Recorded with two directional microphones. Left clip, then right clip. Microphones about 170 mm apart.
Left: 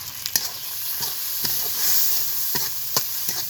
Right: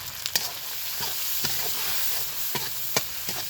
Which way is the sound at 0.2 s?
20° right (ahead or behind).